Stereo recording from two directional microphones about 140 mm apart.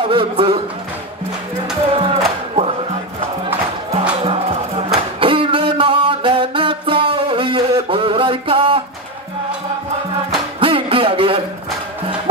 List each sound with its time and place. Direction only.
0.1 s speech: 40° right (ahead or behind)
2.0 s music: 45° right (ahead or behind)
4.2 s music: 45° right (ahead or behind)
10.6 s a sound: 40° right (ahead or behind)